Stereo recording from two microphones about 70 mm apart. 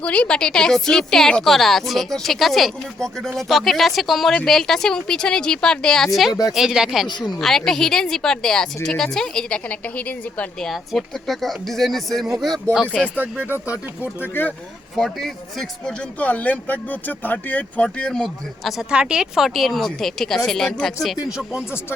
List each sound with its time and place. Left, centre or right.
0.0 s a woman's voice: centre
7.1 s speech: left
7.3 s a woman's voice: centre
9.6 s speech: left
10.6 s speech: centre
13.1 s speech: right
14.2 s speech: left
14.9 s speech: centre
16.1 s speech: left
18.6 s speech: centre